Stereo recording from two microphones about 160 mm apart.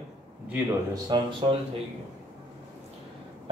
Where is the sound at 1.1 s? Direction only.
30° right (ahead or behind).